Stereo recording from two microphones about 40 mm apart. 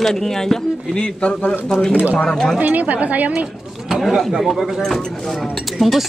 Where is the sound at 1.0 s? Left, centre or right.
Left.